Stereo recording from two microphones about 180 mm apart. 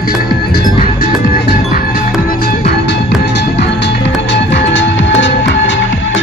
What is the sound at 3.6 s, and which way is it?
Music, 75° left (ahead or behind).